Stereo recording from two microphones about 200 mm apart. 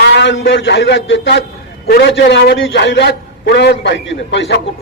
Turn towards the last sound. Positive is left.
turn(degrees=60)  # may be behind; listen again after turning